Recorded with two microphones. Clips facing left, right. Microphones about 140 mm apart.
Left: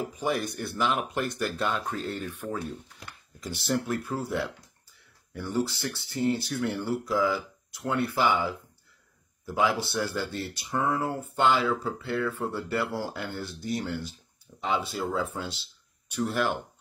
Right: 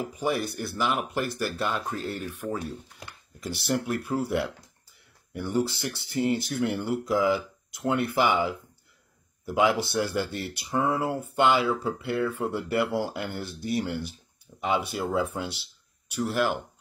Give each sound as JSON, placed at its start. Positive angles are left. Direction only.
{"t": 0.2, "sound": "speech", "side_deg": -5}